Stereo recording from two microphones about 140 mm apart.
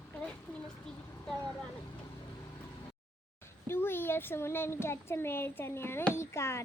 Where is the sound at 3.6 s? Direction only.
15° left (ahead or behind).